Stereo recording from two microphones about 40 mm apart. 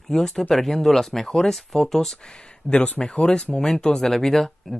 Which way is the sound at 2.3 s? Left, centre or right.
Left.